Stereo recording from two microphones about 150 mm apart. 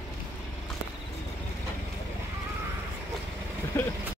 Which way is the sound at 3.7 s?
15° left (ahead or behind).